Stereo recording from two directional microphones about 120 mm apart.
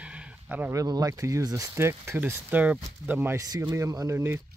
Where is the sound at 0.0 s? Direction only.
10° right (ahead or behind).